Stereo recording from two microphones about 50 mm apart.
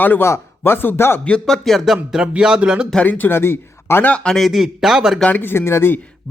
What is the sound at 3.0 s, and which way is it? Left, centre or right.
A man's voice, left.